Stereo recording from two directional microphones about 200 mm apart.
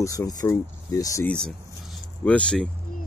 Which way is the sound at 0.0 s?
15° left (ahead or behind).